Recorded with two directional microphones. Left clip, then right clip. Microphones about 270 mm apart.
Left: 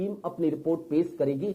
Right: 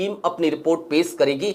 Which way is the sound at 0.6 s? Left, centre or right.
Right.